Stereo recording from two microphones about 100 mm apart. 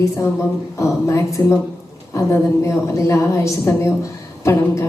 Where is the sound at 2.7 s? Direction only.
30° left (ahead or behind).